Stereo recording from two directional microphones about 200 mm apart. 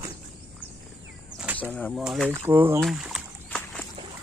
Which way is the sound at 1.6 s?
5° left (ahead or behind).